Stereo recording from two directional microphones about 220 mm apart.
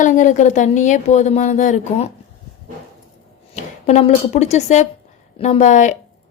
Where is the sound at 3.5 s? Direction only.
30° left (ahead or behind).